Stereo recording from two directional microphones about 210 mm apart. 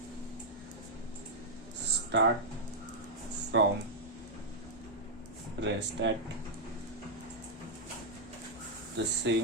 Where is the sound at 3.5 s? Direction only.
60° right (ahead or behind).